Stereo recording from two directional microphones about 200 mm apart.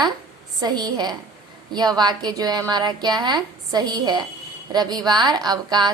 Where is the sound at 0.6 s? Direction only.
20° right (ahead or behind).